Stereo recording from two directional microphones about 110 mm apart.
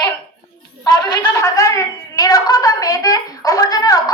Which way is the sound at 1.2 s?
30° left (ahead or behind).